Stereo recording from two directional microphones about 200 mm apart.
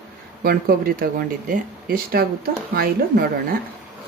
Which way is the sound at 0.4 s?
45° right (ahead or behind).